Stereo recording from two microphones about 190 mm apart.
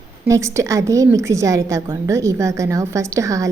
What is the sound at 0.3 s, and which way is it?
A woman's voice, 15° right (ahead or behind).